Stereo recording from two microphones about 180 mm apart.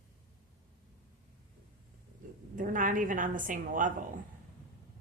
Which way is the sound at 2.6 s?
50° right (ahead or behind).